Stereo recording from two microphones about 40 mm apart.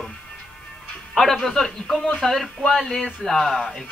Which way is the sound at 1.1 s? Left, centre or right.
Centre.